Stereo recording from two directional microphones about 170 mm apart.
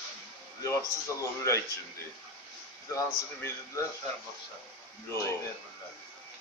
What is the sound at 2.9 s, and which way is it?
Speech, 20° left (ahead or behind).